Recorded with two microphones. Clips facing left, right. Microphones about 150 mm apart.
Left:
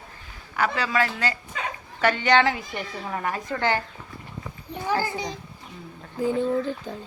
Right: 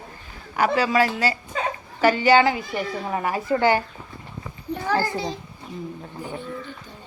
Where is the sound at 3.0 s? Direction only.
15° right (ahead or behind).